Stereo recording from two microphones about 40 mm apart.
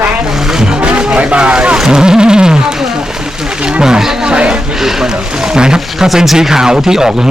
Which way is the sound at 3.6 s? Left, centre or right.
Right.